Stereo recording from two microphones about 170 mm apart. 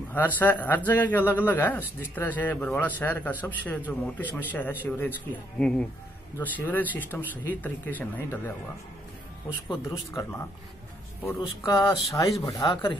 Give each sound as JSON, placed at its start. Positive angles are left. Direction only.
{"t": 0.1, "sound": "speech", "side_deg": 10}
{"t": 9.7, "sound": "speech", "side_deg": 15}
{"t": 11.6, "sound": "speech", "side_deg": 25}